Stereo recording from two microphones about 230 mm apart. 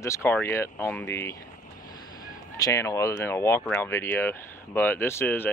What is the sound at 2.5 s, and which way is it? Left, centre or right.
Speech, centre.